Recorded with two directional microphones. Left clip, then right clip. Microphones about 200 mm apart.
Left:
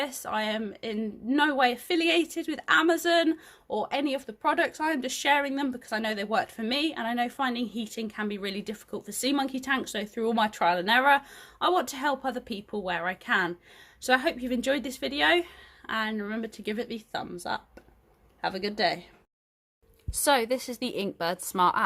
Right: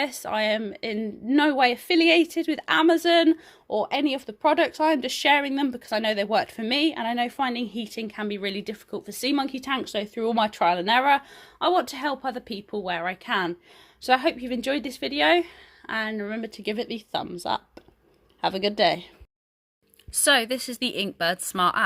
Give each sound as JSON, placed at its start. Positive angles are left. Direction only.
{"t": 0.0, "sound": "a woman's voice", "side_deg": -30}
{"t": 20.2, "sound": "a woman's voice", "side_deg": -5}